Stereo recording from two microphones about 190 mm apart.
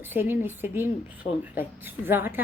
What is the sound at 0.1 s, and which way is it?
Speech, 10° right (ahead or behind).